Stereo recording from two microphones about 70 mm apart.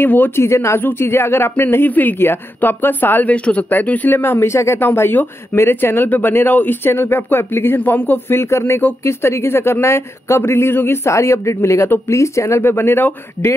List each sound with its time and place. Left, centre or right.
0.0 s speech: left
0.5 s speech: left